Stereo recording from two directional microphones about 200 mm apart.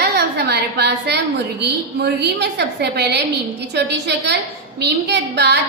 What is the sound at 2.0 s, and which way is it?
A woman's voice, 55° right (ahead or behind).